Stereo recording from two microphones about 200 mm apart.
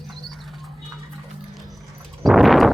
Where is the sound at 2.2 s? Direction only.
Centre (ahead or behind).